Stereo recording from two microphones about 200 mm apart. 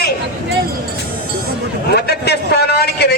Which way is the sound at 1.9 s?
55° left (ahead or behind).